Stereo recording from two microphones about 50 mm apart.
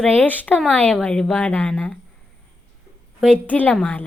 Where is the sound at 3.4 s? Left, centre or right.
Left.